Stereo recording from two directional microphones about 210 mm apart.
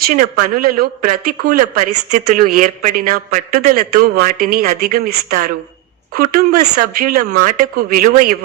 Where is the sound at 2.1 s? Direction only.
40° right (ahead or behind).